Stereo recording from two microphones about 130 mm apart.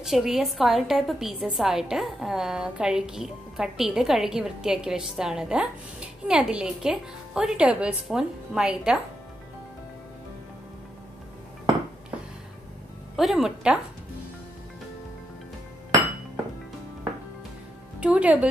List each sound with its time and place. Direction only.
0.0 s a woman's voice: centre (ahead or behind)
13.1 s a woman's voice: centre (ahead or behind)
18.0 s speech: 10° right (ahead or behind)